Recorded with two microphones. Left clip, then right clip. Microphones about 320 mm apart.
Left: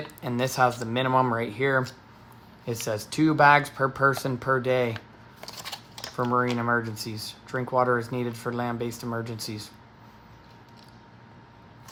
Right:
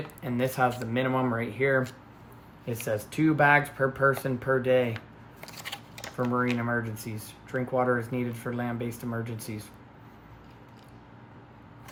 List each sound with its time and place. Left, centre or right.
0.2 s speech: centre